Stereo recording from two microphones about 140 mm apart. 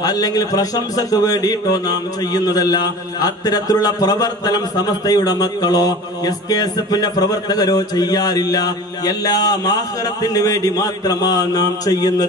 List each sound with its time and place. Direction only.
0.0 s a man's voice: 25° left (ahead or behind)